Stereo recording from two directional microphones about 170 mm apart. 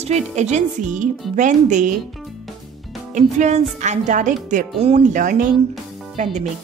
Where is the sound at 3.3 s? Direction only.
45° right (ahead or behind).